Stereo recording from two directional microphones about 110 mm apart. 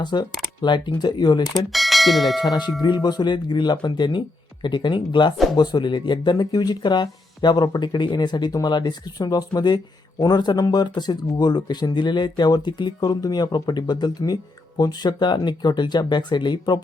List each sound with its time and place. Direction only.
0.0 s speech: 40° left (ahead or behind)
1.5 s speech: centre (ahead or behind)
2.4 s speech: 40° left (ahead or behind)